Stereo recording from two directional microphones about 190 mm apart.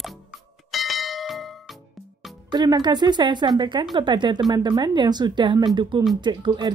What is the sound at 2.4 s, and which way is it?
A woman's voice, 20° right (ahead or behind).